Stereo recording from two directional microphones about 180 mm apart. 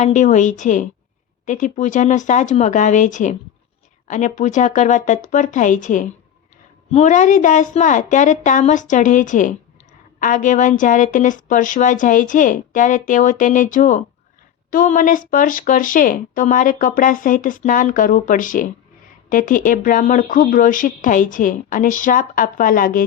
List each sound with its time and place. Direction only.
0.0 s speech: 40° left (ahead or behind)